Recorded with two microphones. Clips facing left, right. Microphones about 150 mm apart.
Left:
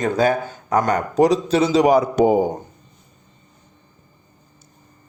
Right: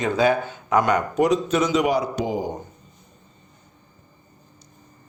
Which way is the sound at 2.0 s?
50° left (ahead or behind).